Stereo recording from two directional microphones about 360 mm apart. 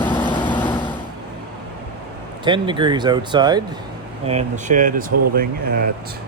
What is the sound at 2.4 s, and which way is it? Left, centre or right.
Speech, centre.